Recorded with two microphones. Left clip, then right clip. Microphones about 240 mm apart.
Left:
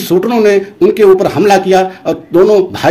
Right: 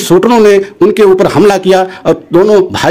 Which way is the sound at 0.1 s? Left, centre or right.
Right.